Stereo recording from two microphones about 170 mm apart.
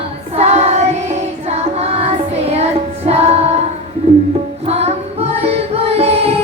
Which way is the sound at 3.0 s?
40° right (ahead or behind).